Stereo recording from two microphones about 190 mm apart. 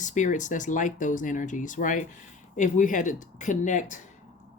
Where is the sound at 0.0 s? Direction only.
40° left (ahead or behind).